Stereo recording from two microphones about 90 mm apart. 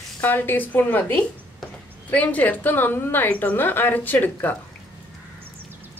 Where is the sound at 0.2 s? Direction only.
20° left (ahead or behind).